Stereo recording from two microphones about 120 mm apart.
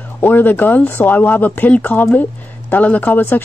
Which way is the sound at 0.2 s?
15° left (ahead or behind).